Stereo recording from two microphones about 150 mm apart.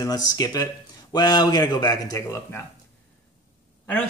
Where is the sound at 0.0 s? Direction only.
25° left (ahead or behind).